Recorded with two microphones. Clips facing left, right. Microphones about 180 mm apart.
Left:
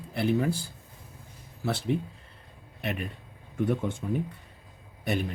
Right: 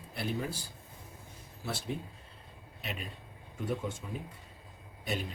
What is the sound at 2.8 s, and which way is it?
Speech, 60° left (ahead or behind).